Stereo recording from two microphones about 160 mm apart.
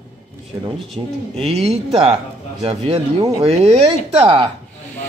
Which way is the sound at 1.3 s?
40° right (ahead or behind).